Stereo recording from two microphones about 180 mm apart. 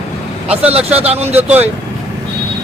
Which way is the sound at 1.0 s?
35° right (ahead or behind).